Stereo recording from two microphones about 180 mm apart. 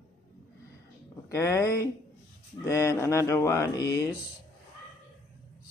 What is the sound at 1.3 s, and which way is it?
Speech, 15° left (ahead or behind).